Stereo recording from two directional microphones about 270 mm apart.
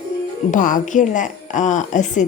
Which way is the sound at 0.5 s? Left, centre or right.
Left.